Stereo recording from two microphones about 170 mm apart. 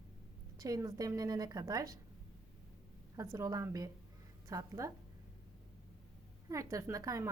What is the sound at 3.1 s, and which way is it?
A woman's voice, 20° right (ahead or behind).